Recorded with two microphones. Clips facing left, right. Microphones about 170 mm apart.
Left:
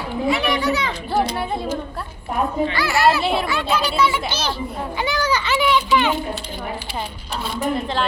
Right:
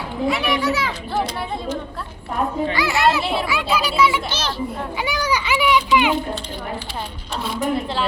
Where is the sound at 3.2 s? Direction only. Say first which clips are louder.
Left 1 dB; centre (ahead or behind).